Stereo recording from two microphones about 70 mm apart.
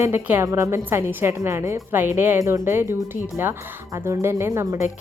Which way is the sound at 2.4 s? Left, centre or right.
Right.